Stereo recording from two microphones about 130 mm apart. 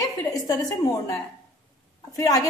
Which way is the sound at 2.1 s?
30° left (ahead or behind).